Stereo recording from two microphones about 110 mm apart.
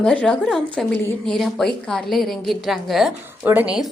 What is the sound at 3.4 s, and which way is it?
Speech, 15° right (ahead or behind).